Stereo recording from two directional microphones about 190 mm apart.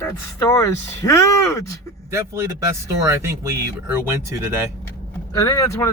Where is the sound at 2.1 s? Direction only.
15° right (ahead or behind).